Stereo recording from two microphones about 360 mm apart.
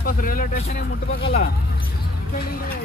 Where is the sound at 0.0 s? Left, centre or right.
Left.